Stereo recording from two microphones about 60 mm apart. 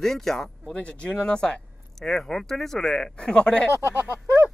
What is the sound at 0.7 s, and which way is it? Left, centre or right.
Speech, left.